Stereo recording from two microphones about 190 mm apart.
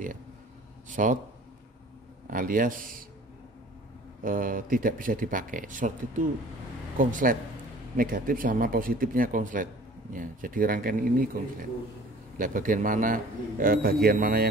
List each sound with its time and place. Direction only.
0.8 s a man's voice: 45° right (ahead or behind)
2.2 s a man's voice: 45° right (ahead or behind)
4.2 s a man's voice: 45° right (ahead or behind)
12.4 s a man's voice: 45° right (ahead or behind)